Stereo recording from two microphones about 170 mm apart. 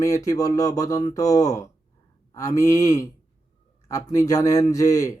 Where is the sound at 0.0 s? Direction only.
20° left (ahead or behind).